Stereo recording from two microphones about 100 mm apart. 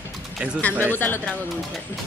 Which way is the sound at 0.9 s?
20° left (ahead or behind).